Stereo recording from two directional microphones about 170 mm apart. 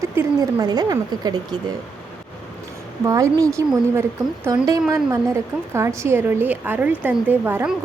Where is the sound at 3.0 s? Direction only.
20° right (ahead or behind).